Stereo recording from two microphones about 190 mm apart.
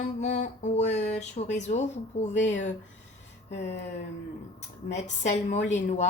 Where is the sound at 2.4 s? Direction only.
80° left.